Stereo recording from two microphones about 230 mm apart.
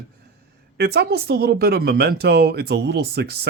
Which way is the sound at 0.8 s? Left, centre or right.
Right.